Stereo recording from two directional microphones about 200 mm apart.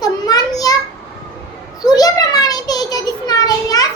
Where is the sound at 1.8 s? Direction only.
20° left (ahead or behind).